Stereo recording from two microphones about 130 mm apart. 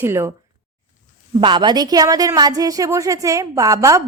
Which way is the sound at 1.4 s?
35° right (ahead or behind).